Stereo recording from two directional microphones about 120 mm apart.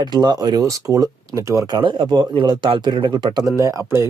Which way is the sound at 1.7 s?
40° right (ahead or behind).